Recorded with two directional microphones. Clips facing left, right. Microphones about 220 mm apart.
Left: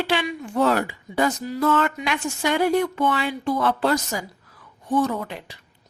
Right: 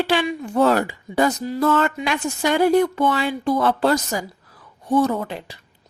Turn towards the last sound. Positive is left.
turn(degrees=-35)  # may be behind; listen again after turning